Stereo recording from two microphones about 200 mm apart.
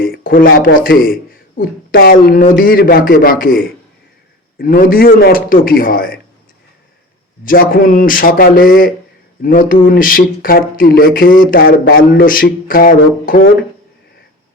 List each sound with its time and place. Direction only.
0.0 s speech: 45° left (ahead or behind)
7.4 s speech: 45° left (ahead or behind)